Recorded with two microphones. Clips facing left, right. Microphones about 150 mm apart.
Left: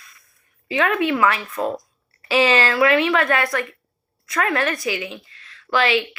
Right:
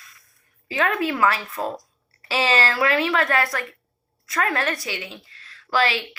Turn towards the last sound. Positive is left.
turn(degrees=-35)  # may be behind; listen again after turning